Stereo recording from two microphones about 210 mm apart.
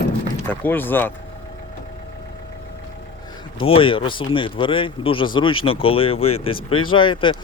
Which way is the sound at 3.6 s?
25° left (ahead or behind).